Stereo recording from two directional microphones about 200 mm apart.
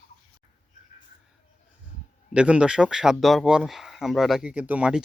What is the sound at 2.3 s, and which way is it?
Speech, 5° right (ahead or behind).